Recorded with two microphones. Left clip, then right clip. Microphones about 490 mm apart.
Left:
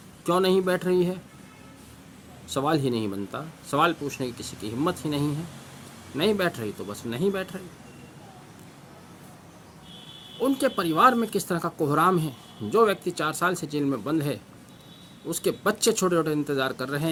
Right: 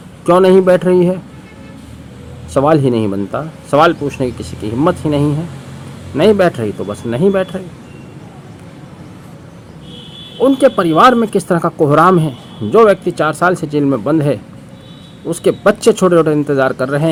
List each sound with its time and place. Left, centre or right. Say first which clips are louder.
0.3 s speech: right 15 dB; left
2.5 s speech: right 14 dB; left
10.4 s speech: right 14 dB; left